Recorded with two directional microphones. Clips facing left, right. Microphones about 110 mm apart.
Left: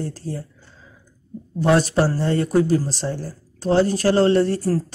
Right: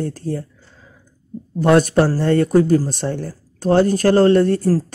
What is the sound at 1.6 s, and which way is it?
Speech, 55° right (ahead or behind).